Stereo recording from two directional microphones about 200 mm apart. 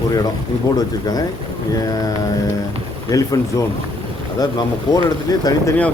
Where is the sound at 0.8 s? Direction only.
20° left (ahead or behind).